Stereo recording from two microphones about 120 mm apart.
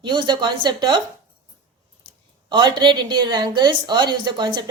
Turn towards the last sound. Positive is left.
turn(degrees=-40)  # may be behind; listen again after turning